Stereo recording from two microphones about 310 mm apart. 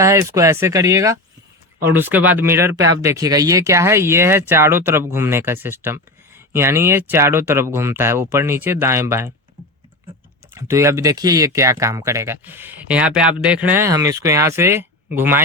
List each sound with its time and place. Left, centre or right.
0.0 s speech: centre
10.5 s speech: centre